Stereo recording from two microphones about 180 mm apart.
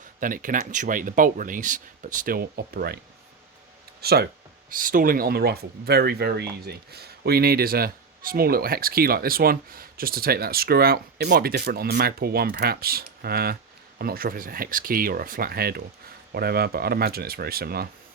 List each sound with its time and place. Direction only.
0.2 s speech: 50° right (ahead or behind)
4.0 s speech: 60° right (ahead or behind)
4.7 s speech: 50° right (ahead or behind)